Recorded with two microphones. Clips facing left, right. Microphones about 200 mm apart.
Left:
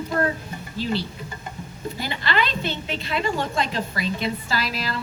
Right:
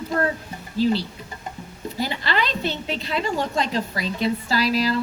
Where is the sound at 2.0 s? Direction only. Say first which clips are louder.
Right 1 dB; 40° right (ahead or behind).